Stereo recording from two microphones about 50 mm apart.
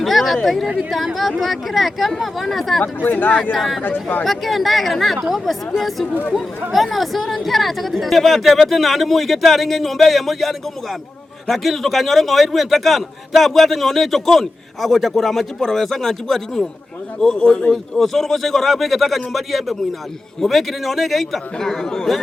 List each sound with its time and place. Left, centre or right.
0.0 s a sound: centre
0.4 s a man's voice: centre
2.8 s speech: left
3.5 s a man's voice: centre
3.8 s speech: left
4.2 s a man's voice: centre